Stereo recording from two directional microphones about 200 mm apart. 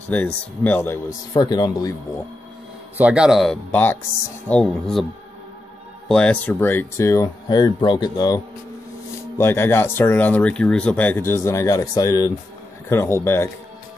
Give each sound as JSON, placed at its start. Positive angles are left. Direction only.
{"t": 0.1, "sound": "speech", "side_deg": 10}
{"t": 1.3, "sound": "speech", "side_deg": 20}
{"t": 3.0, "sound": "speech", "side_deg": -5}
{"t": 6.0, "sound": "speech", "side_deg": 5}
{"t": 9.4, "sound": "speech", "side_deg": 10}